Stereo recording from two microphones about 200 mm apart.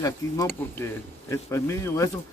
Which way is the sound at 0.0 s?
15° left (ahead or behind).